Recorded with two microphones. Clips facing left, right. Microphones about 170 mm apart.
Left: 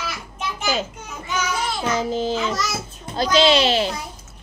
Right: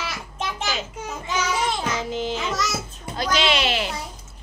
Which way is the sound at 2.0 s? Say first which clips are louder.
Left 4 dB; 35° left (ahead or behind).